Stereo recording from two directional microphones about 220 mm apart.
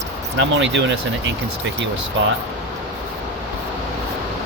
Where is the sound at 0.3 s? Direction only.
55° right (ahead or behind).